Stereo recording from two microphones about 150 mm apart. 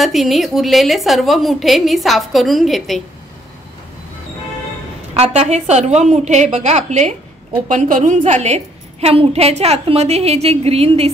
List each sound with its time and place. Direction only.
0.0 s a woman's voice: centre (ahead or behind)
5.1 s a woman's voice: 45° right (ahead or behind)